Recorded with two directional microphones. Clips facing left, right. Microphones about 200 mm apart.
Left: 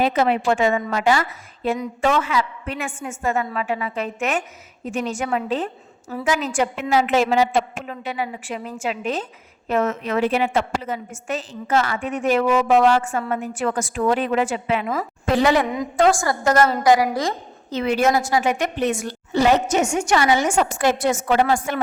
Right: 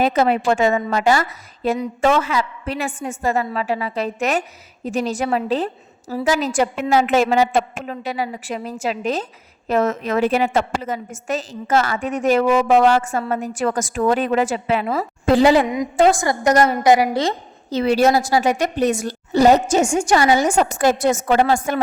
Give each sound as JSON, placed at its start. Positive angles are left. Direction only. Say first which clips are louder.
{"t": 0.0, "sound": "a woman's voice", "louder": "right 2 dB", "side_deg": -40}
{"t": 16.0, "sound": "a woman's voice", "louder": "right 2 dB", "side_deg": -20}